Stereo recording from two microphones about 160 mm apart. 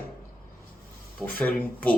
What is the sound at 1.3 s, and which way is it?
Speech, 10° left (ahead or behind).